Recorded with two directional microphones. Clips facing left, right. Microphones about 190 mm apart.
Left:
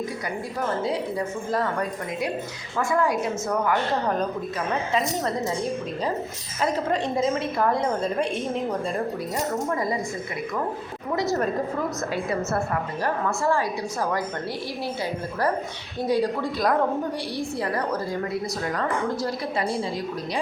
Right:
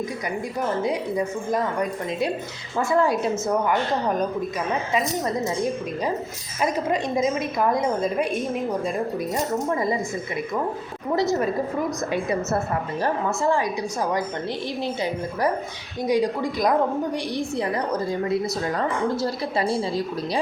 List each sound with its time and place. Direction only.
0.8 s a woman's voice: 15° right (ahead or behind)
2.7 s a woman's voice: 25° right (ahead or behind)
6.6 s a woman's voice: 15° right (ahead or behind)
9.6 s a woman's voice: 25° right (ahead or behind)
12.1 s a woman's voice: 20° right (ahead or behind)
16.0 s a woman's voice: 15° right (ahead or behind)
18.8 s a woman's voice: 25° right (ahead or behind)